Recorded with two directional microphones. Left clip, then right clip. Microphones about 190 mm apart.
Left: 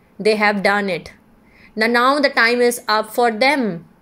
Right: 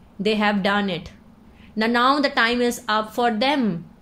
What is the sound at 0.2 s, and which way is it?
A woman's voice, 25° left (ahead or behind).